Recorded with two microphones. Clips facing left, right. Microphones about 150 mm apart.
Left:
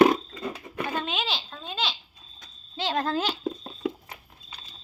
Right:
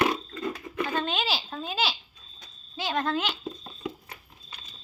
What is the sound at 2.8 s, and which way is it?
Speech, 30° left (ahead or behind).